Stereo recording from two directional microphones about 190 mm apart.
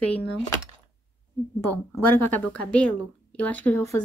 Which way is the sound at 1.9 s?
10° left (ahead or behind).